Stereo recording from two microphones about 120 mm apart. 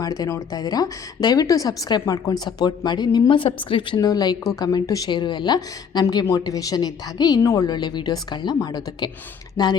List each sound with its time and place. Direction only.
0.0 s a woman's voice: 30° left (ahead or behind)